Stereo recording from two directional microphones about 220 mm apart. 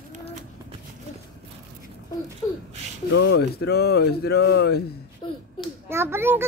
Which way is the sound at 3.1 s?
50° left (ahead or behind).